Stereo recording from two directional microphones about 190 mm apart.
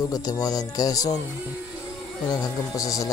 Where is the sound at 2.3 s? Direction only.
15° left (ahead or behind).